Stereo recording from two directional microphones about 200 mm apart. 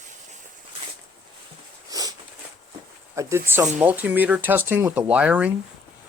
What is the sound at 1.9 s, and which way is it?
Sniff, 20° right (ahead or behind).